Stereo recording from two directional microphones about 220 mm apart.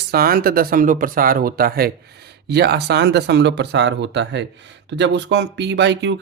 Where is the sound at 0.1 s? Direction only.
45° right (ahead or behind).